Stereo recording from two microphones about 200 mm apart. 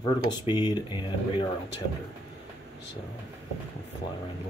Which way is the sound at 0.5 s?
20° left (ahead or behind).